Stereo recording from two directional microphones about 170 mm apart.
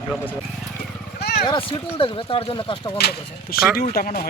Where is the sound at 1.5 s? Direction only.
30° left (ahead or behind).